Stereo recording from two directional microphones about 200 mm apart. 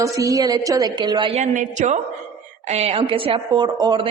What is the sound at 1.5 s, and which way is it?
A woman's voice, 40° right (ahead or behind).